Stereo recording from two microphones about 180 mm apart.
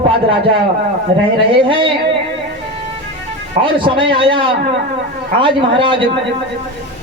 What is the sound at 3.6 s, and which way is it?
A man's voice, 30° right (ahead or behind).